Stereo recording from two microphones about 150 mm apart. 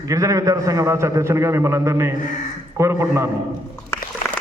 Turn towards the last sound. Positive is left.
turn(degrees=-15)  # may be behind; listen again after turning